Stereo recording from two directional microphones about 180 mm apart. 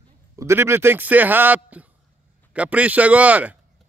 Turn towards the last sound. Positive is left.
turn(degrees=-10)  # may be behind; listen again after turning